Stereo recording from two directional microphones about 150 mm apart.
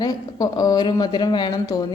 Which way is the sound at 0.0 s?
25° left (ahead or behind).